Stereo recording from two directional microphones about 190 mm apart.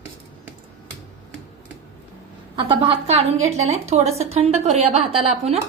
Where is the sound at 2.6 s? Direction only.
30° right (ahead or behind).